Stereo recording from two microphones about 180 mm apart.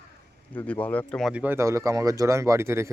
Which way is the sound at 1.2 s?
10° right (ahead or behind).